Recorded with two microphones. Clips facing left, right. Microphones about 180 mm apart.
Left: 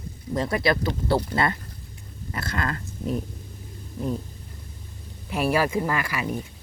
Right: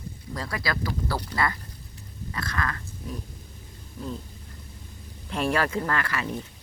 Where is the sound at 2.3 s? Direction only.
25° left (ahead or behind).